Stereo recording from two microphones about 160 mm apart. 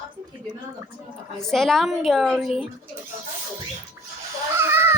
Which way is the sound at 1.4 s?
Centre (ahead or behind).